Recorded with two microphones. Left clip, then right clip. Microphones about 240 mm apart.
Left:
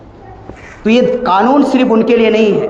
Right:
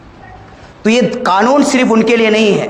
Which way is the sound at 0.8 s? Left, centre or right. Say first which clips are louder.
Left 1 dB; right.